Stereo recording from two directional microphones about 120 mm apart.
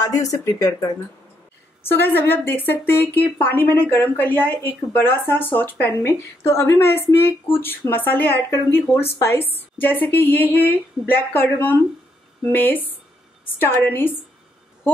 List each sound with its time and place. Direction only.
0.2 s speech: 30° left (ahead or behind)
1.9 s a woman's voice: 15° left (ahead or behind)